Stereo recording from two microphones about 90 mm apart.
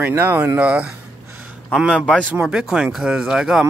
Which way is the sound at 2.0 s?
10° left (ahead or behind).